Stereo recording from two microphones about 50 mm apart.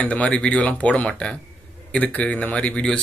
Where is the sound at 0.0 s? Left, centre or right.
Left.